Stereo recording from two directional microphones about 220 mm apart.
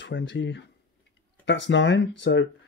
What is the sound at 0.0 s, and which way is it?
Speech, 55° left (ahead or behind).